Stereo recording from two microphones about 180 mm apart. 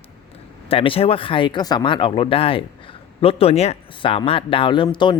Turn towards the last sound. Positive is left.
turn(degrees=25)  # may be behind; listen again after turning